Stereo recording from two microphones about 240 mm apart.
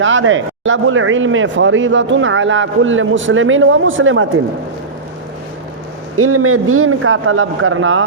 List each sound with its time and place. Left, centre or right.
0.0 s speech: right
6.1 s a man's voice: right